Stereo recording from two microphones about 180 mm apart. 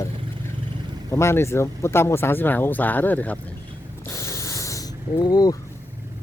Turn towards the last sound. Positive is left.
turn(degrees=20)  # may be behind; listen again after turning